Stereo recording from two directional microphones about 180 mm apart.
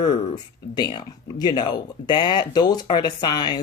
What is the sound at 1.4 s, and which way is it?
Speech, 25° left (ahead or behind).